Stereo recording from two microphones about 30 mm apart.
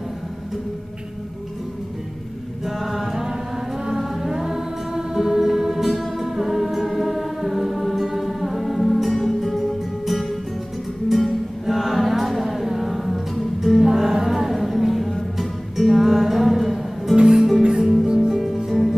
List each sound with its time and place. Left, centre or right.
2.6 s music: centre
17.2 s music: right
18.7 s music: centre